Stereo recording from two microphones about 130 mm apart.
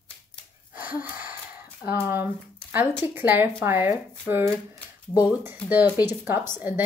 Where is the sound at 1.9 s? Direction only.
15° right (ahead or behind).